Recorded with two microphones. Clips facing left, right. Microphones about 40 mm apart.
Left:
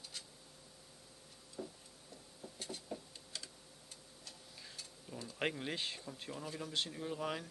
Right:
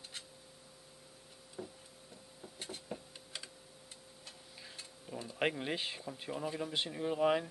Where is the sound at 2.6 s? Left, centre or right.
Right.